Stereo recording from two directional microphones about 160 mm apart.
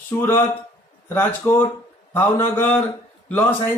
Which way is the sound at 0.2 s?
15° left (ahead or behind).